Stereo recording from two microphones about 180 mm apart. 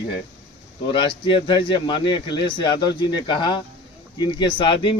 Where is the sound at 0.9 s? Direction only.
30° left (ahead or behind).